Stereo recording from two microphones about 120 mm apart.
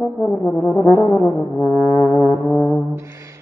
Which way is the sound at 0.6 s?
20° left (ahead or behind).